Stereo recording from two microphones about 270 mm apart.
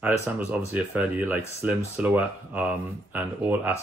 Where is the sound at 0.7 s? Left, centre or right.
Centre.